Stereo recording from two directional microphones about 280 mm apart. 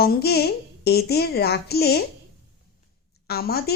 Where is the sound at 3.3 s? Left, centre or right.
Left.